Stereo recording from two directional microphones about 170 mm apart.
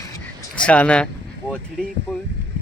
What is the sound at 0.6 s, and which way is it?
Speech, 5° left (ahead or behind).